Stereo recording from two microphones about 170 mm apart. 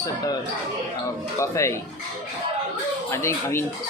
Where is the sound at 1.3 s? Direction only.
15° left (ahead or behind).